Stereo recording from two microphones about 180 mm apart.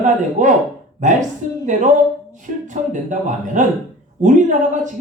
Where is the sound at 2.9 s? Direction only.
45° right (ahead or behind).